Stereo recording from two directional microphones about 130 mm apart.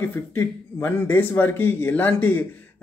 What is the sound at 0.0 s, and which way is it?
A man's voice, 15° left (ahead or behind).